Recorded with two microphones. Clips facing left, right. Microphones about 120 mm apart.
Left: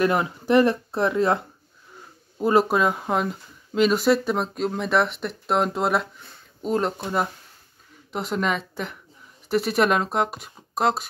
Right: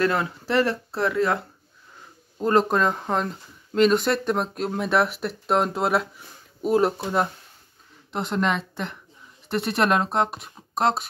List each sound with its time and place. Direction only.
0.0 s speech: 15° left (ahead or behind)
2.3 s speech: 10° left (ahead or behind)